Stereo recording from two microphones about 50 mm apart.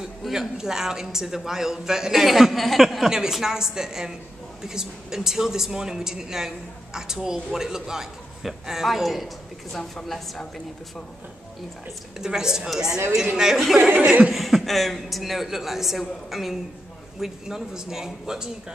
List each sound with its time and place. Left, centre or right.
0.3 s a woman's voice: centre
12.2 s a woman's voice: centre
14.0 s chuckle: right
14.3 s a man's voice: centre